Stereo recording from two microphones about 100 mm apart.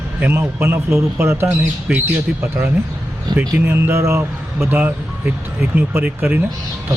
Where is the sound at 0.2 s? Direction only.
20° right (ahead or behind).